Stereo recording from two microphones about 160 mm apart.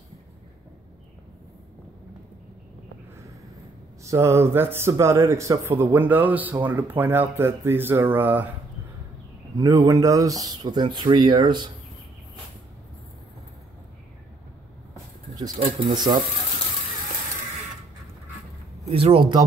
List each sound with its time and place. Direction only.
4.0 s speech: 20° right (ahead or behind)
9.6 s speech: 20° right (ahead or behind)
15.3 s a sound: 25° right (ahead or behind)
15.8 s speech: 25° right (ahead or behind)
18.9 s speech: 35° right (ahead or behind)